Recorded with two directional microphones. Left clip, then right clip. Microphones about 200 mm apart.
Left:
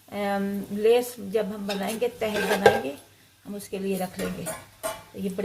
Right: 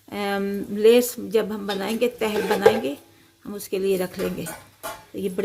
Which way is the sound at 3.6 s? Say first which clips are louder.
Right 7 dB; 55° right (ahead or behind).